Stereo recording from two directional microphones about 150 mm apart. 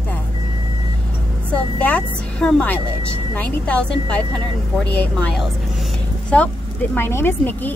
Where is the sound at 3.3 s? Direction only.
10° left (ahead or behind).